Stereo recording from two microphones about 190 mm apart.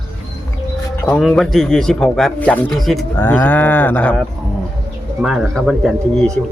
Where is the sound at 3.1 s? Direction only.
10° left (ahead or behind).